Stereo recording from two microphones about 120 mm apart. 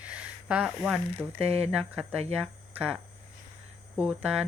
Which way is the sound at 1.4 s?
55° right (ahead or behind).